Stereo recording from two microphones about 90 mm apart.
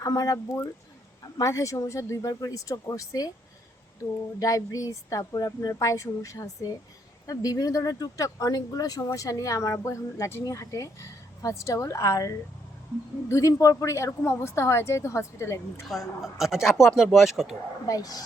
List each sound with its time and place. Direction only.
0.0 s speech: 45° left (ahead or behind)
1.4 s a woman's voice: 35° left (ahead or behind)
4.4 s a woman's voice: 40° left (ahead or behind)
15.8 s speech: centre (ahead or behind)
17.8 s speech: 45° left (ahead or behind)